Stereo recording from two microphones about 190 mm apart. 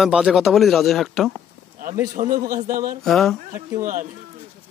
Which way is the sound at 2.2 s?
40° right (ahead or behind).